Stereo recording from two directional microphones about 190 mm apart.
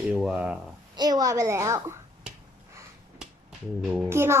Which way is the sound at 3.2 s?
5° right (ahead or behind).